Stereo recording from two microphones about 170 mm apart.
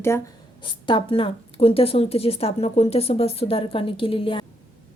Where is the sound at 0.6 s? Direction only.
30° left (ahead or behind).